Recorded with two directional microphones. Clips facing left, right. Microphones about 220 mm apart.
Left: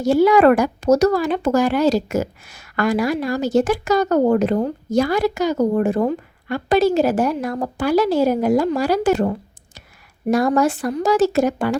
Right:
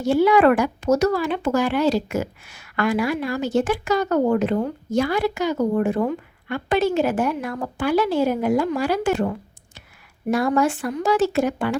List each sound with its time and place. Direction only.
0.0 s speech: 40° left (ahead or behind)